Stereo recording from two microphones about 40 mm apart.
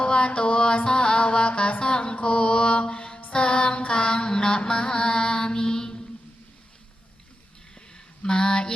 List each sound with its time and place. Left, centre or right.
0.0 s music: left
3.3 s mantra: left
7.9 s a sound: left